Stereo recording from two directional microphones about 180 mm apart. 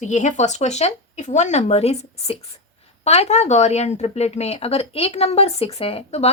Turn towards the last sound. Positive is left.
turn(degrees=35)  # may be behind; listen again after turning